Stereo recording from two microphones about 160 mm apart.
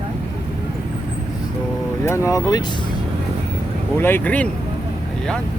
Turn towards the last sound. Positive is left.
turn(degrees=10)  # may be behind; listen again after turning